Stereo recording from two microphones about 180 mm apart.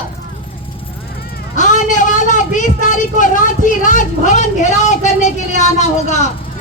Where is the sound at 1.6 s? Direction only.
45° left (ahead or behind).